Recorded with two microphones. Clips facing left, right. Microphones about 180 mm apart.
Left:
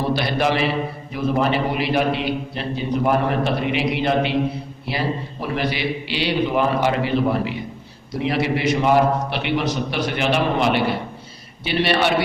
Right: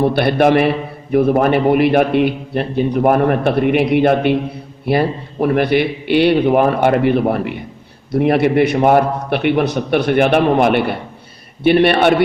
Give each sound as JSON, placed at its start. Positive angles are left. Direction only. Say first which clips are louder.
{"t": 0.0, "sound": "a man's voice", "louder": "right 8 dB", "side_deg": -55}